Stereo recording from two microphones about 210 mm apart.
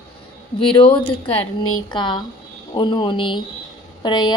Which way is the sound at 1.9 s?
20° left (ahead or behind).